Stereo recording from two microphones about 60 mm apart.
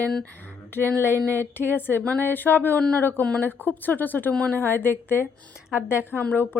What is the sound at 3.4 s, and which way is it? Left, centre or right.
Speech, left.